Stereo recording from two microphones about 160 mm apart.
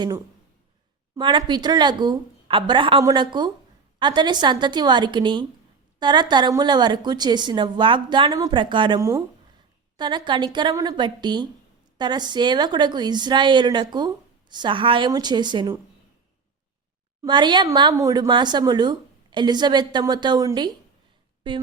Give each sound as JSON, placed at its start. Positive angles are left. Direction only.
{"t": 1.2, "sound": "a woman's voice", "side_deg": -30}
{"t": 17.2, "sound": "a woman's voice", "side_deg": -30}
{"t": 21.5, "sound": "a sound", "side_deg": -30}